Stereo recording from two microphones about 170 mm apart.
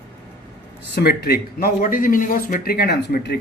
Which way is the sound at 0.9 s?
70° left (ahead or behind).